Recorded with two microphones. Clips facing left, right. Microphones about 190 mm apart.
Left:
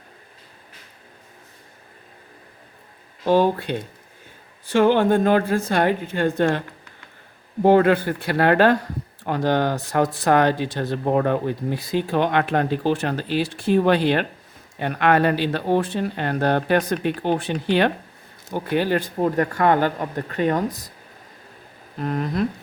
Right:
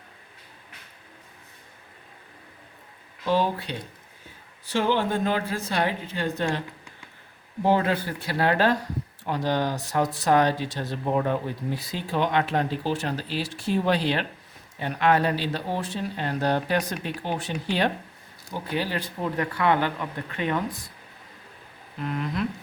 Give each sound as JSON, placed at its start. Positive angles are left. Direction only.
{"t": 3.2, "sound": "speech", "side_deg": 50}
{"t": 7.6, "sound": "speech", "side_deg": 60}
{"t": 18.5, "sound": "speech", "side_deg": 55}
{"t": 21.9, "sound": "speech", "side_deg": 40}